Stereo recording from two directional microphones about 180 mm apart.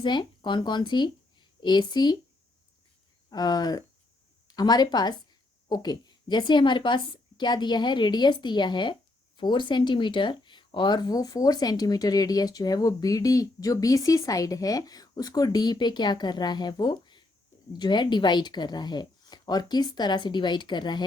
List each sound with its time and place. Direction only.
0.0 s a woman's voice: 25° left (ahead or behind)
3.2 s speech: 20° left (ahead or behind)